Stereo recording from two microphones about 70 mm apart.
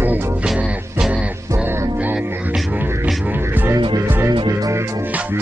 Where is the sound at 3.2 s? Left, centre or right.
Right.